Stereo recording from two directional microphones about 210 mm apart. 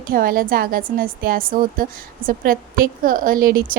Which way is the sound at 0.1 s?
40° right (ahead or behind).